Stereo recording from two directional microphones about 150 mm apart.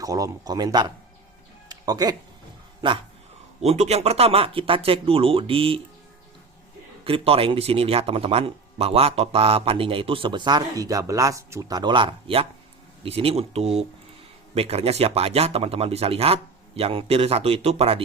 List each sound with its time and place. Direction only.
0.0 s speech: 25° right (ahead or behind)
1.7 s music: 25° right (ahead or behind)
3.6 s speech: 45° right (ahead or behind)
7.0 s speech: 40° right (ahead or behind)